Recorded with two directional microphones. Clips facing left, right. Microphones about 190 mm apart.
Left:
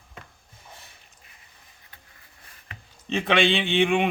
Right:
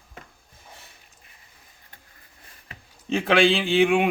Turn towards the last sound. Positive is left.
turn(degrees=-5)  # may be behind; listen again after turning